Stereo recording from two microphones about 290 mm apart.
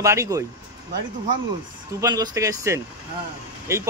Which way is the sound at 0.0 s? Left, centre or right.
Centre.